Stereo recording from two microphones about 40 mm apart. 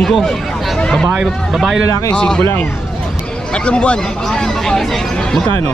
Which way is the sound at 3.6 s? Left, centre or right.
Left.